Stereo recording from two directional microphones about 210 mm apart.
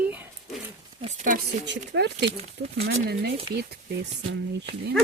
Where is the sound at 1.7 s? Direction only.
55° right (ahead or behind).